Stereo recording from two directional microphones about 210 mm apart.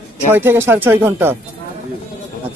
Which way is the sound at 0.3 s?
10° right (ahead or behind).